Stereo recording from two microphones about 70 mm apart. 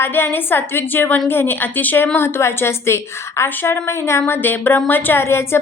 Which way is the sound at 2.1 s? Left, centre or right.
Left.